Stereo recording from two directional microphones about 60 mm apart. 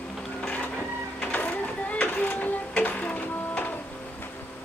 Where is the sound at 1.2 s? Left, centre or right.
Left.